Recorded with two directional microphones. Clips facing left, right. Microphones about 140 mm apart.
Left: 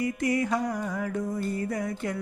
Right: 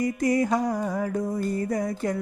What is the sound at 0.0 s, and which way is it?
Music, 40° right (ahead or behind).